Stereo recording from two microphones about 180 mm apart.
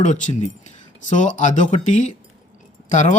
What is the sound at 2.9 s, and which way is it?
Speech, 40° left (ahead or behind).